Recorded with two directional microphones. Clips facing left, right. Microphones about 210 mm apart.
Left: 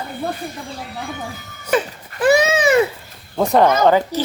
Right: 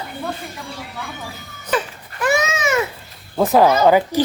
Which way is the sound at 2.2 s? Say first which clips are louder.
Left 5 dB; 30° left (ahead or behind).